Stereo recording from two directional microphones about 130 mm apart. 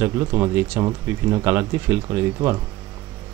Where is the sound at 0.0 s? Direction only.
20° right (ahead or behind).